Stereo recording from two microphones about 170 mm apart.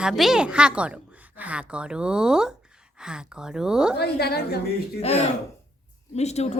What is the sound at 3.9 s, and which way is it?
Speech, 70° left (ahead or behind).